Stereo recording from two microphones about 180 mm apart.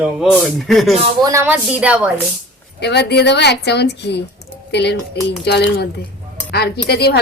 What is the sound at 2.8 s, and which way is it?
A woman's voice, 70° left (ahead or behind).